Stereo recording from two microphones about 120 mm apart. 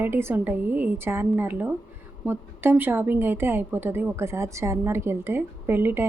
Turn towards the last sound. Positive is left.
turn(degrees=-20)  # may be behind; listen again after turning